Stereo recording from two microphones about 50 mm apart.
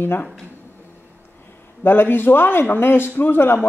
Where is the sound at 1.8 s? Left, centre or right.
Left.